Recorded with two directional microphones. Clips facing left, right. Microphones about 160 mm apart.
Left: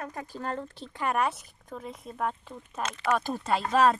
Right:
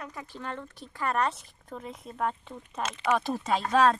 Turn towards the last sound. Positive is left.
turn(degrees=5)  # may be behind; listen again after turning